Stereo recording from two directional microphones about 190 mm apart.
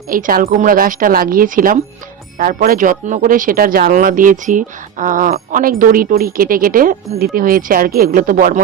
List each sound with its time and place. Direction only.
0.1 s speech: 50° right (ahead or behind)